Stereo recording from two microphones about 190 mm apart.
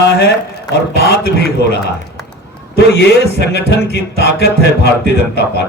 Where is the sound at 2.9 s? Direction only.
65° left (ahead or behind).